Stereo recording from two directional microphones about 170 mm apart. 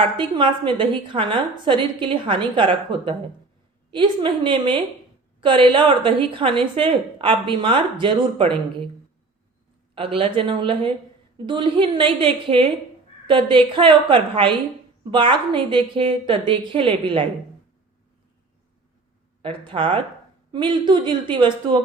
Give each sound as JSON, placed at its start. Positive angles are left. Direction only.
{"t": 0.2, "sound": "a woman's voice", "side_deg": -30}
{"t": 9.9, "sound": "a woman's voice", "side_deg": -35}
{"t": 19.6, "sound": "a woman's voice", "side_deg": -30}